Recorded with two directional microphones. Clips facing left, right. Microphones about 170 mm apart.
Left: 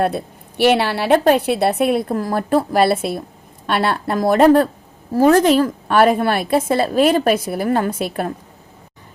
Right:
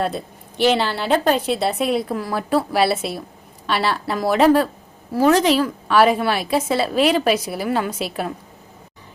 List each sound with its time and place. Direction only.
0.0 s a woman's voice: 60° left (ahead or behind)